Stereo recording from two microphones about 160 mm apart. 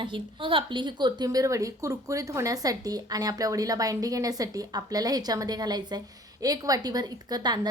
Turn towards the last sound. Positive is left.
turn(degrees=-25)  # may be behind; listen again after turning